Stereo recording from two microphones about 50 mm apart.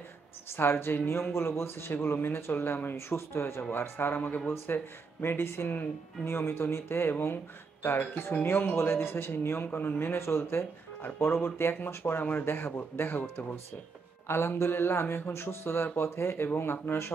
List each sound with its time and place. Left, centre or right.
0.6 s a man's voice: left
1.3 s speech: left
2.1 s a man's voice: left
3.2 s speech: left
4.0 s a man's voice: left
10.1 s a man's voice: left
13.2 s speech: left
14.2 s a man's voice: left